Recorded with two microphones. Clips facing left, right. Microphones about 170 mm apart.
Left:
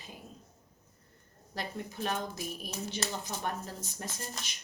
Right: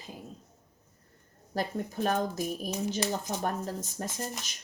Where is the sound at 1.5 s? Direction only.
45° right (ahead or behind).